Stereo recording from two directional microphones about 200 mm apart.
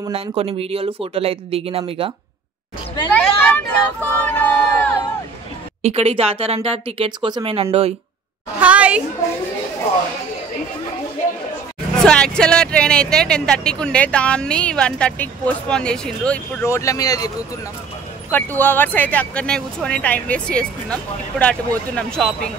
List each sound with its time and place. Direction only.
0.1 s speech: 30° right (ahead or behind)
3.1 s speech: 10° left (ahead or behind)
5.8 s speech: 30° right (ahead or behind)
8.5 s a woman's voice: 5° right (ahead or behind)
12.0 s speech: 5° left (ahead or behind)
18.3 s speech: 10° left (ahead or behind)